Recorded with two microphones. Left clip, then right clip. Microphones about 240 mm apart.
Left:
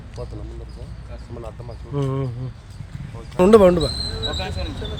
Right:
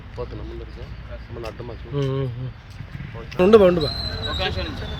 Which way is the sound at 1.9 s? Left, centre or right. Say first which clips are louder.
Even; centre.